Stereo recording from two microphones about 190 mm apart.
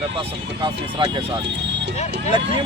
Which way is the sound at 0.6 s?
25° right (ahead or behind).